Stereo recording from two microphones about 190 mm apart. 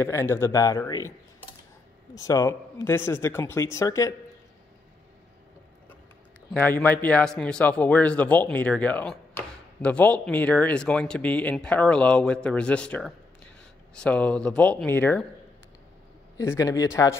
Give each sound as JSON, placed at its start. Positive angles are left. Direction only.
{"t": 0.0, "sound": "a man's voice", "side_deg": 10}
{"t": 2.1, "sound": "a man's voice", "side_deg": 20}
{"t": 6.5, "sound": "a man's voice", "side_deg": 10}
{"t": 16.3, "sound": "a man's voice", "side_deg": 15}